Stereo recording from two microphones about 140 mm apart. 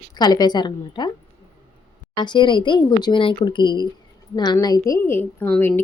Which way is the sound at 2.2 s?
35° left (ahead or behind).